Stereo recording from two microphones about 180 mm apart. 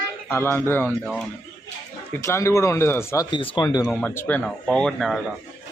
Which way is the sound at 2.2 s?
15° left (ahead or behind).